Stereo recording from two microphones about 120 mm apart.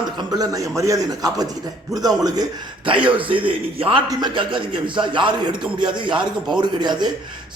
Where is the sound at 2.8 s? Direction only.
45° right (ahead or behind).